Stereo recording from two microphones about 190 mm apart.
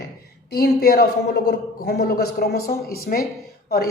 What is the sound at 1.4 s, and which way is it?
Speech, 60° left (ahead or behind).